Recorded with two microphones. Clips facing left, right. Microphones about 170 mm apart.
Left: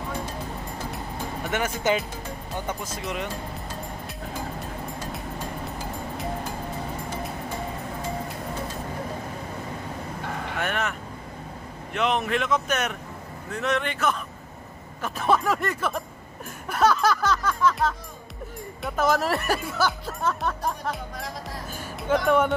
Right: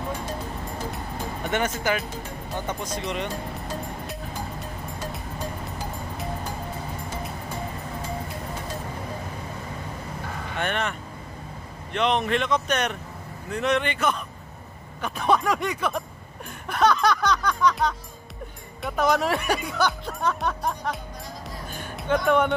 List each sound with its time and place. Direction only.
0.9 s music: 5° left (ahead or behind)
1.8 s speech: 20° left (ahead or behind)
2.6 s speech: 5° left (ahead or behind)
10.6 s speech: 5° left (ahead or behind)
16.6 s music: 5° left (ahead or behind)
18.8 s speech: centre (ahead or behind)
21.7 s music: 5° left (ahead or behind)